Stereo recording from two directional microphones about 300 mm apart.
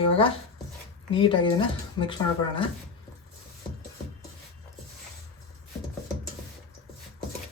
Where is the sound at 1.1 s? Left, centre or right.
Centre.